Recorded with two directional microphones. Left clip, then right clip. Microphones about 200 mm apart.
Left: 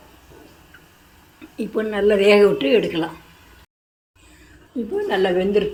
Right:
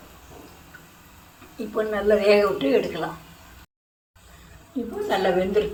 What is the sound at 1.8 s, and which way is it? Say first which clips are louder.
A woman's voice: left 3 dB; 45° left (ahead or behind).